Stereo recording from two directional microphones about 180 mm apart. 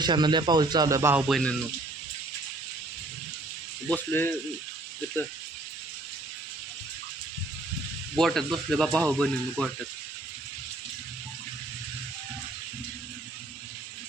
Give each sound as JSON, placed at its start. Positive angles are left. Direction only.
{"t": 0.0, "sound": "speech", "side_deg": -25}
{"t": 1.3, "sound": "speech", "side_deg": 5}
{"t": 3.8, "sound": "speech", "side_deg": 10}
{"t": 8.2, "sound": "speech", "side_deg": 0}